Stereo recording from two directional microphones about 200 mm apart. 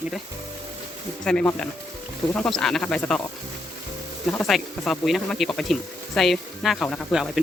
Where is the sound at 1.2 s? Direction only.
5° left (ahead or behind).